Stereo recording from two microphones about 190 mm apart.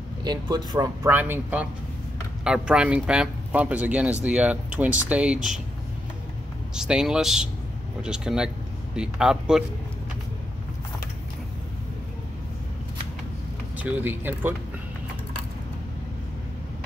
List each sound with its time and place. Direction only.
0.2 s speech: 20° right (ahead or behind)
1.1 s speech: 10° right (ahead or behind)
6.7 s speech: 5° right (ahead or behind)
13.7 s speech: 10° right (ahead or behind)